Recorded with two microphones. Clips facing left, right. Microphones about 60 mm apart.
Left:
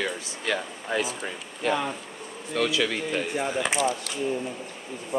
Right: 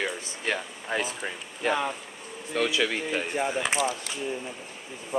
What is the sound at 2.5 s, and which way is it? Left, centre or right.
Speech, centre.